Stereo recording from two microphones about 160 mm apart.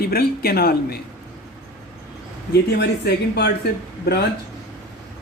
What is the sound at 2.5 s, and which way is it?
Speech, 90° left.